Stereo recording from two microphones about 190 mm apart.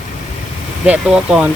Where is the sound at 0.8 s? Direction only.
5° right (ahead or behind).